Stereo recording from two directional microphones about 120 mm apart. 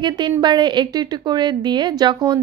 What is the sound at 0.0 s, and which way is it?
A woman's voice, 35° right (ahead or behind).